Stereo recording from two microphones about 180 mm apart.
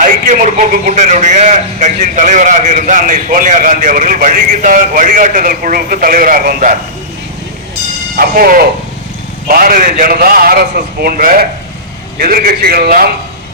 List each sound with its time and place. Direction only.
0.0 s a man's voice: 45° right (ahead or behind)
8.1 s a man's voice: 55° right (ahead or behind)